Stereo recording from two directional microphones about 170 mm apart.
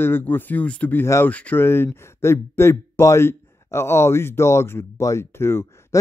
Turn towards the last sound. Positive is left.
turn(degrees=15)  # may be behind; listen again after turning